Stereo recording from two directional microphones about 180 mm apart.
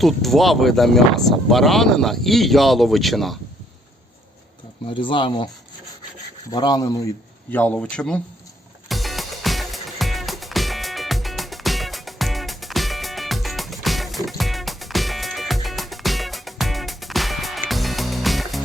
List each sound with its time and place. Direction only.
0.0 s speech: centre (ahead or behind)
4.9 s speech: 30° left (ahead or behind)
6.5 s speech: 25° left (ahead or behind)
7.5 s speech: 10° left (ahead or behind)
8.9 s music: centre (ahead or behind)